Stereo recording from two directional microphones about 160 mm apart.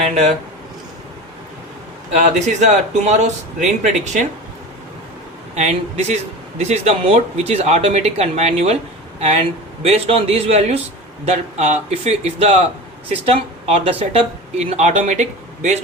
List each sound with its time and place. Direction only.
0.0 s speech: 40° right (ahead or behind)
2.1 s speech: 45° right (ahead or behind)
5.5 s speech: 45° right (ahead or behind)